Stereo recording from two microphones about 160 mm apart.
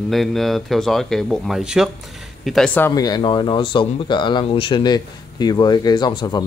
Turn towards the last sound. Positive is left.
turn(degrees=25)  # may be behind; listen again after turning